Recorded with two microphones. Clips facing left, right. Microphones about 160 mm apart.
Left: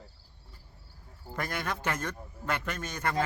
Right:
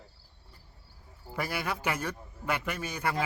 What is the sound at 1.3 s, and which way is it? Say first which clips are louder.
Speech: right 1 dB; 5° right (ahead or behind).